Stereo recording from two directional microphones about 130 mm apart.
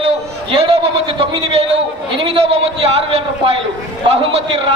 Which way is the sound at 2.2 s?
45° right (ahead or behind).